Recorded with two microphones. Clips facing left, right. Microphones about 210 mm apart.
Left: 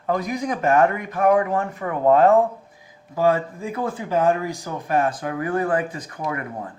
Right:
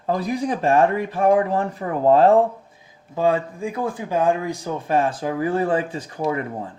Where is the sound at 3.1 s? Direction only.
20° right (ahead or behind).